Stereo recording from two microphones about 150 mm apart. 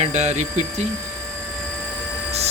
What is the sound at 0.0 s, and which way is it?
Speech, 50° right (ahead or behind).